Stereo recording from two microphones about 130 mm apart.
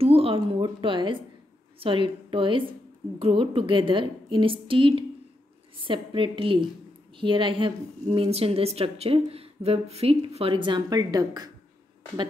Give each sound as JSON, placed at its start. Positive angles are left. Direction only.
{"t": 0.0, "sound": "a woman's voice", "side_deg": -45}